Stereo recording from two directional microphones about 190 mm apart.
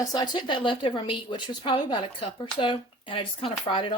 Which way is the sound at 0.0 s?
20° left (ahead or behind).